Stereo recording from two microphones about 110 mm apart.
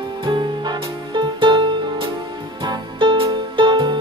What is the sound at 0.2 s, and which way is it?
Music, 50° right (ahead or behind).